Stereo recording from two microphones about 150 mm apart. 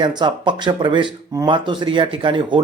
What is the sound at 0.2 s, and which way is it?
Speech, 30° right (ahead or behind).